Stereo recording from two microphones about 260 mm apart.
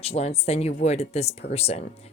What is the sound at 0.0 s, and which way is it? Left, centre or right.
A woman's voice, left.